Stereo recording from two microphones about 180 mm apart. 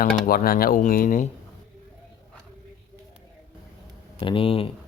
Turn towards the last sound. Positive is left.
turn(degrees=30)  # may be behind; listen again after turning